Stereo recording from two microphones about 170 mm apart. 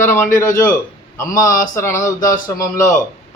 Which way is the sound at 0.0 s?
15° left (ahead or behind).